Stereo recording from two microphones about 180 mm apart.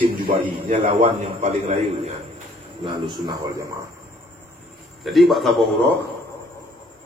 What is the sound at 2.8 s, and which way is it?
Speech, 25° right (ahead or behind).